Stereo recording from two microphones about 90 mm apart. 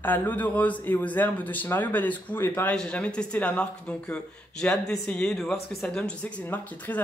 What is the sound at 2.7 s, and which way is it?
Speech, 10° left (ahead or behind).